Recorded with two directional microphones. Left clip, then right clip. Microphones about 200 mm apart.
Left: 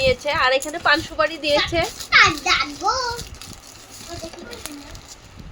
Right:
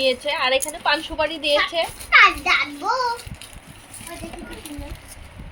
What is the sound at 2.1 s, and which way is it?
Children playing, 10° left (ahead or behind).